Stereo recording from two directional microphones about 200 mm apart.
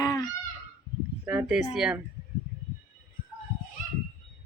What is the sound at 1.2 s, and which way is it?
Speech, 5° right (ahead or behind).